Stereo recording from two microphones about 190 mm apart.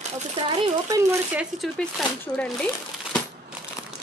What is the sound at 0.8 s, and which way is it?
Speech, 20° right (ahead or behind).